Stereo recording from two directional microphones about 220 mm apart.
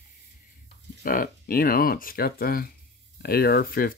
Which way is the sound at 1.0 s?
40° left (ahead or behind).